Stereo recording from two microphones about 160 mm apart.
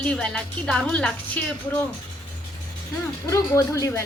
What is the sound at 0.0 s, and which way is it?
A woman's voice, 5° left (ahead or behind).